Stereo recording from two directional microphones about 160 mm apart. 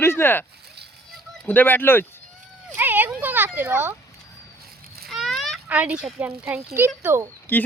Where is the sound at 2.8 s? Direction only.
10° right (ahead or behind).